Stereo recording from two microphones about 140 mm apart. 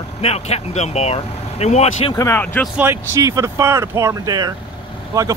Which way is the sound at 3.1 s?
20° right (ahead or behind).